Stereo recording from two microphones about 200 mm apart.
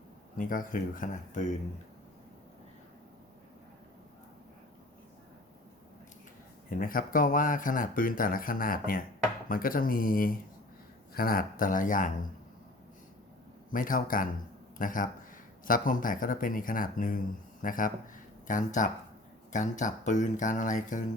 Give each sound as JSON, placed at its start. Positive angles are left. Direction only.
{"t": 0.3, "sound": "speech", "side_deg": 45}
{"t": 6.7, "sound": "speech", "side_deg": 45}
{"t": 13.7, "sound": "speech", "side_deg": 45}